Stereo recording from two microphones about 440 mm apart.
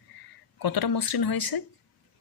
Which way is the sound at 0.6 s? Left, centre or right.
Left.